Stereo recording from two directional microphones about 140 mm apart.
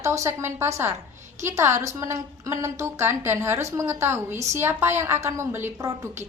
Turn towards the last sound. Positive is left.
turn(degrees=-15)  # may be behind; listen again after turning